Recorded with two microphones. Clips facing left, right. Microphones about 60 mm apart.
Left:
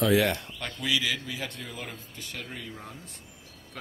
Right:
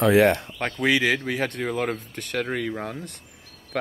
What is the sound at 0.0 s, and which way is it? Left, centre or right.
Speech, right.